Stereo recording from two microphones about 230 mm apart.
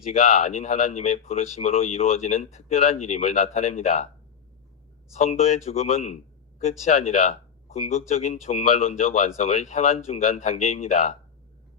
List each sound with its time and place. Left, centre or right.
0.1 s speech: left
5.1 s speech: left